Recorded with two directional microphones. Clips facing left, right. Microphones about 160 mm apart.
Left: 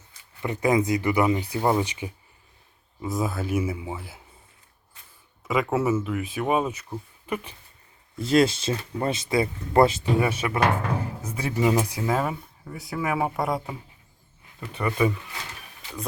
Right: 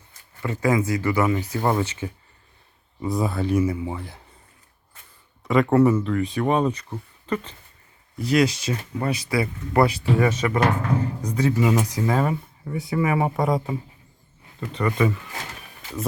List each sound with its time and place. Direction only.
0.4 s speech: 20° left (ahead or behind)
3.0 s speech: centre (ahead or behind)
5.4 s a sound: centre (ahead or behind)
5.7 s speech: 5° left (ahead or behind)
8.2 s speech: 25° left (ahead or behind)
10.2 s speech: 10° left (ahead or behind)